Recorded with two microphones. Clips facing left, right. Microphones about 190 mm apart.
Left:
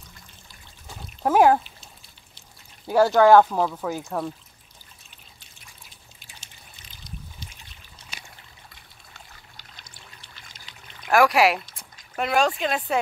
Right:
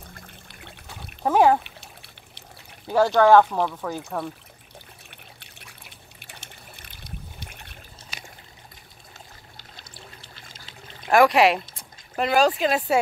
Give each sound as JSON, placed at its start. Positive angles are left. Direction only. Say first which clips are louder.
{"t": 0.0, "sound": "trickle", "louder": "right 6 dB", "side_deg": -60}
{"t": 1.2, "sound": "speech", "louder": "left 1 dB", "side_deg": 5}
{"t": 1.6, "sound": "trickle", "louder": "right 4 dB", "side_deg": -65}
{"t": 2.9, "sound": "speech", "louder": "left 1 dB", "side_deg": 10}
{"t": 5.1, "sound": "trickle", "louder": "right 6 dB", "side_deg": -65}
{"t": 10.3, "sound": "water", "louder": "right 3 dB", "side_deg": -35}
{"t": 11.1, "sound": "speech", "louder": "right 2 dB", "side_deg": 0}